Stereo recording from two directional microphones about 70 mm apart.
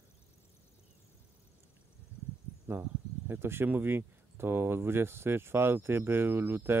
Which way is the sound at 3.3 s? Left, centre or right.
Right.